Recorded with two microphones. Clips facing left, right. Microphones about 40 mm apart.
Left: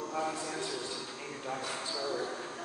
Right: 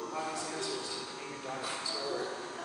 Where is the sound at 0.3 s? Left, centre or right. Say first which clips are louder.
Left 1 dB; centre.